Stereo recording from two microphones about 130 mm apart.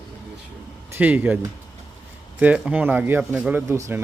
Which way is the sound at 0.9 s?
15° right (ahead or behind).